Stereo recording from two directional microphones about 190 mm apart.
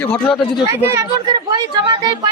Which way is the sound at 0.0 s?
5° left (ahead or behind).